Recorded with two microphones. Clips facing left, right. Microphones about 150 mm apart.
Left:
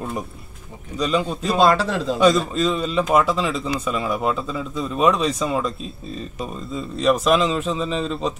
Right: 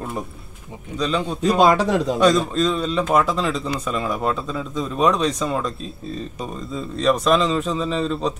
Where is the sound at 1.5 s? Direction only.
15° right (ahead or behind).